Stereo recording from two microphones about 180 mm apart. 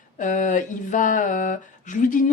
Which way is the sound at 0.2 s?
45° left (ahead or behind).